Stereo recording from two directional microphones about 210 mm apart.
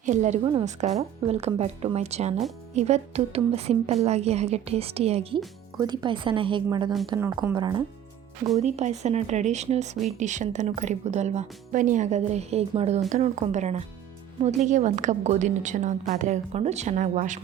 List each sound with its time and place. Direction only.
0.0 s a woman's voice: 35° right (ahead or behind)
8.4 s speech: 30° right (ahead or behind)